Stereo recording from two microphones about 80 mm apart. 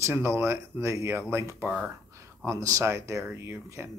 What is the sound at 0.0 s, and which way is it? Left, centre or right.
Speech, right.